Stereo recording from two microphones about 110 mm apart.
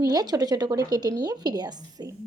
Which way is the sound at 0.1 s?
35° right (ahead or behind).